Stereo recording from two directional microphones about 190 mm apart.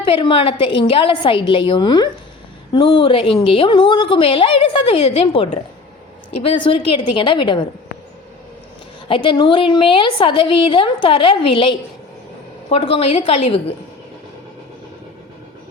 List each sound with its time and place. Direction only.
0.0 s a woman's voice: 25° left (ahead or behind)
9.0 s a woman's voice: 25° left (ahead or behind)